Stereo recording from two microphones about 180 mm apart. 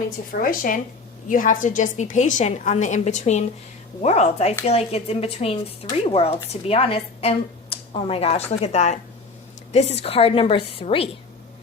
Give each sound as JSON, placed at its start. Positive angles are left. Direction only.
{"t": 0.3, "sound": "a woman's voice", "side_deg": 50}